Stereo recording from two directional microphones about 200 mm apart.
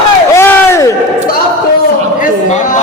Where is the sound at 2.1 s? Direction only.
40° left (ahead or behind).